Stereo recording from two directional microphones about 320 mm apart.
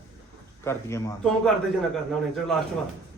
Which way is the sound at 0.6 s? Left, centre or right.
Centre.